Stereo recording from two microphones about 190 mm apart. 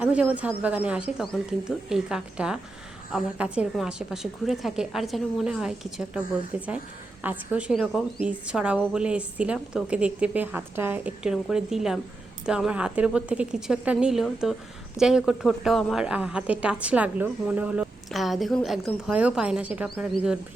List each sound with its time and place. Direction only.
0.0 s a woman's voice: 5° right (ahead or behind)